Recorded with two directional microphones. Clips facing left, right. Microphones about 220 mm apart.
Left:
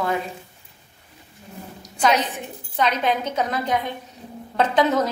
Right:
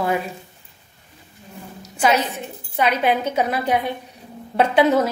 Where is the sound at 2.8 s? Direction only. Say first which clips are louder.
Right 3 dB; 10° right (ahead or behind).